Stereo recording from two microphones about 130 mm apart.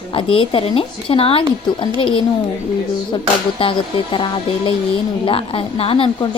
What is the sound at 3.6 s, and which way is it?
A woman's voice, 40° left (ahead or behind).